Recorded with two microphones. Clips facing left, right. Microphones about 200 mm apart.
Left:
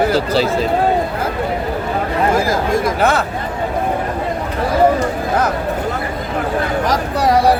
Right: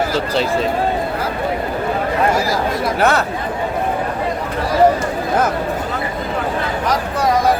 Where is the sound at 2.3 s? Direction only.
50° left (ahead or behind).